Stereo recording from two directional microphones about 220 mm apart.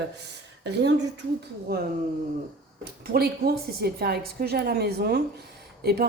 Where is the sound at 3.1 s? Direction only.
45° right (ahead or behind).